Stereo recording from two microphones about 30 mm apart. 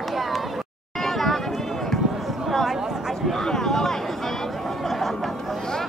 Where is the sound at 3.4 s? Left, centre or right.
Centre.